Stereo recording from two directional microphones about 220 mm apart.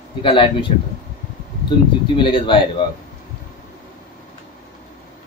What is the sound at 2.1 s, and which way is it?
Speech, 20° left (ahead or behind).